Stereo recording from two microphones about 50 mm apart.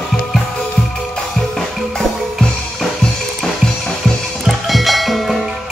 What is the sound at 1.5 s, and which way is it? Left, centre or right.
Music, centre.